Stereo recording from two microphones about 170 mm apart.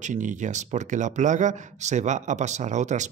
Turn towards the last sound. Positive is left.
turn(degrees=-45)  # may be behind; listen again after turning